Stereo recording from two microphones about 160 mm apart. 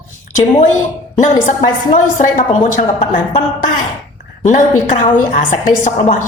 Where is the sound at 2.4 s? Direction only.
50° left (ahead or behind).